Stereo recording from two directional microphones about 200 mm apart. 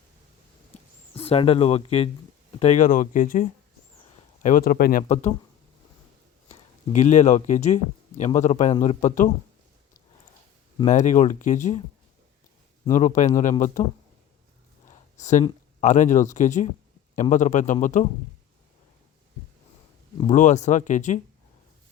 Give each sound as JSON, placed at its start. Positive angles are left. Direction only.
{"t": 1.1, "sound": "speech", "side_deg": 30}
{"t": 4.4, "sound": "speech", "side_deg": 45}
{"t": 6.5, "sound": "speech", "side_deg": 35}
{"t": 10.8, "sound": "speech", "side_deg": 40}
{"t": 13.0, "sound": "speech", "side_deg": 40}
{"t": 14.8, "sound": "a sound", "side_deg": 40}
{"t": 15.8, "sound": "speech", "side_deg": 40}
{"t": 20.3, "sound": "speech", "side_deg": 40}